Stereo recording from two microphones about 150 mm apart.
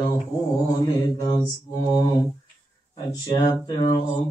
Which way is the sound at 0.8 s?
25° left (ahead or behind).